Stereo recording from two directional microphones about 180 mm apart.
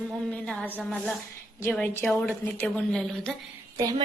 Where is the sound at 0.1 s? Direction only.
5° left (ahead or behind).